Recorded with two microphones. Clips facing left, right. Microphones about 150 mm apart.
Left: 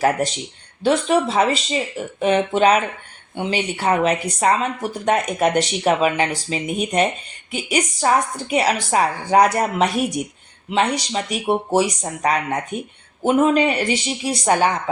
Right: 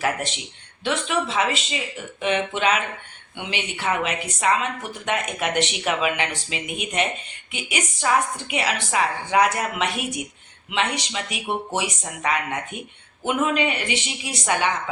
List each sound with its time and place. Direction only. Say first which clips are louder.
0.0 s speech: left 7 dB; 40° left (ahead or behind)